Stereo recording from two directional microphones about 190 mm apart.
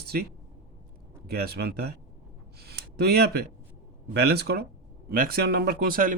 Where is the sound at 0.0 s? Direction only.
55° right (ahead or behind).